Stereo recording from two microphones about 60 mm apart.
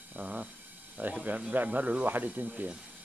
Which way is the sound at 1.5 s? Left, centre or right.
Right.